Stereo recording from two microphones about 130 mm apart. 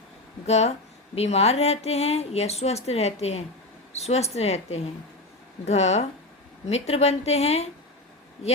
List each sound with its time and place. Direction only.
0.4 s speech: 55° left (ahead or behind)